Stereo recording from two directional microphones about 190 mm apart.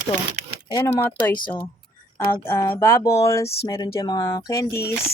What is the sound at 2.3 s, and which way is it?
Speech, 10° left (ahead or behind).